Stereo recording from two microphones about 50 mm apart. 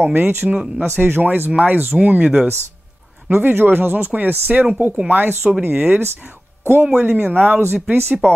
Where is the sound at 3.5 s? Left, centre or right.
Right.